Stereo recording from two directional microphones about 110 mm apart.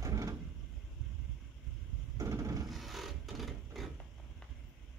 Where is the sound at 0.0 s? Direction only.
30° right (ahead or behind).